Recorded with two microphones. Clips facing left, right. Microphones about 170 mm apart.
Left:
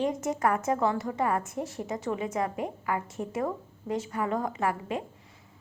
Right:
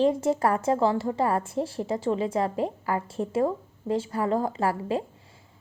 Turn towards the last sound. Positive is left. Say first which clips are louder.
# right 4 dB
turn(degrees=-30)  # may be behind; listen again after turning